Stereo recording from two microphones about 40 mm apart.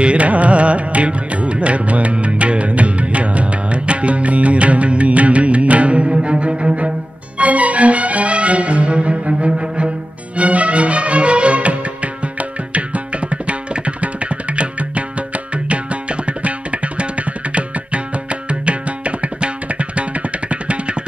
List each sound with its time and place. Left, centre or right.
0.0 s music: right